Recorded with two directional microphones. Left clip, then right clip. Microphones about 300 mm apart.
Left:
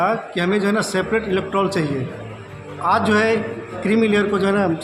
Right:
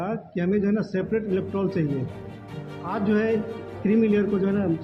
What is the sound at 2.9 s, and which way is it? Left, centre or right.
A man's voice, centre.